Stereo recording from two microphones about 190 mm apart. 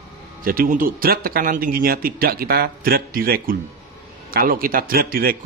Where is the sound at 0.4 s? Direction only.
50° right (ahead or behind).